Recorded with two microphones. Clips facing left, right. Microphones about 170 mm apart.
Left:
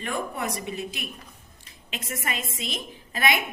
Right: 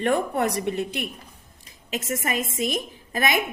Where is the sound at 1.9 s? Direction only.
45° right (ahead or behind).